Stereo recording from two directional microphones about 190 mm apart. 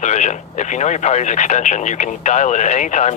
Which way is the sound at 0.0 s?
35° left (ahead or behind).